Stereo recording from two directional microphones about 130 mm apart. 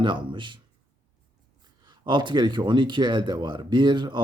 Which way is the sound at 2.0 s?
35° right (ahead or behind).